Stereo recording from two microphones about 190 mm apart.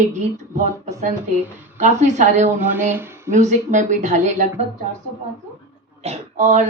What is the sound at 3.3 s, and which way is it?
Speech, 40° right (ahead or behind).